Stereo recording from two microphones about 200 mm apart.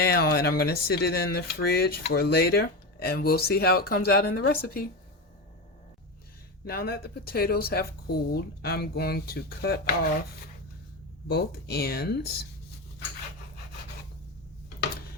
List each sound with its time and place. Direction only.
0.0 s speech: 50° left (ahead or behind)
6.7 s speech: 50° left (ahead or behind)
11.3 s speech: 50° left (ahead or behind)